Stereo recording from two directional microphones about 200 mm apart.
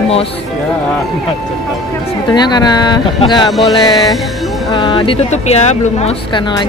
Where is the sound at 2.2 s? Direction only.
20° left (ahead or behind).